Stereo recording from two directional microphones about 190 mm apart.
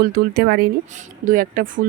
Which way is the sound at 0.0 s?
50° right (ahead or behind).